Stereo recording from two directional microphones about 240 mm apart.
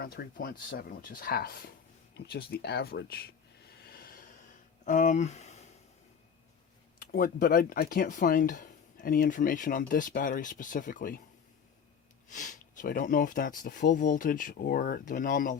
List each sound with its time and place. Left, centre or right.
0.0 s speech: left
3.8 s a sound: left
4.9 s speech: left
7.0 s speech: left
12.3 s speech: left